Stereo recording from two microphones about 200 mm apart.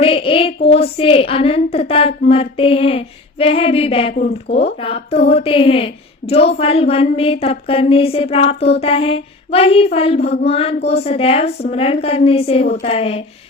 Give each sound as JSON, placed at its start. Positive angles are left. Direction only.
{"t": 0.0, "sound": "child singing", "side_deg": 30}
{"t": 0.7, "sound": "a woman's voice", "side_deg": 30}
{"t": 12.6, "sound": "a woman's voice", "side_deg": 45}
{"t": 12.9, "sound": "a woman's voice", "side_deg": 30}